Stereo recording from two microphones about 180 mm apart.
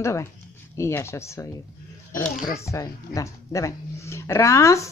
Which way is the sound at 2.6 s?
15° left (ahead or behind).